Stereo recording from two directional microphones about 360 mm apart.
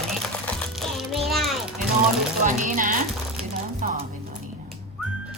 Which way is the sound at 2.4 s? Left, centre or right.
Right.